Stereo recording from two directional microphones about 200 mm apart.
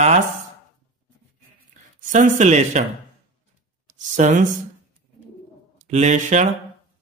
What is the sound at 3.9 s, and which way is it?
Speech, 35° right (ahead or behind).